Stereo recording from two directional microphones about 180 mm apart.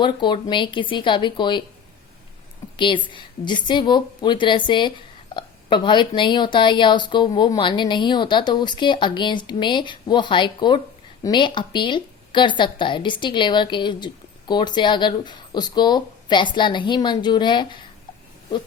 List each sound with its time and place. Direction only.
0.0 s a woman's voice: 25° left (ahead or behind)
2.7 s a woman's voice: 25° left (ahead or behind)